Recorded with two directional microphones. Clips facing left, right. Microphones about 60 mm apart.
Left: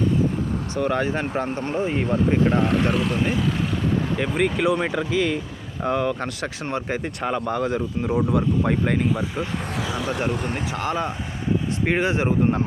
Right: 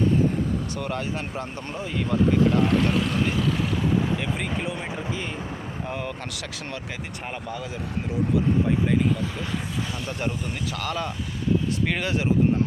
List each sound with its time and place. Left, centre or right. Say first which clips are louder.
0.8 s speech: left 7 dB; left
2.7 s speech: left 1 dB; centre
4.2 s speech: left 7 dB; left
5.8 s speech: left 11 dB; left
6.4 s speech: left 7 dB; left
7.3 s speech: left 10 dB; left
10.1 s speech: left 6 dB; left
10.8 s speech: left 4 dB; left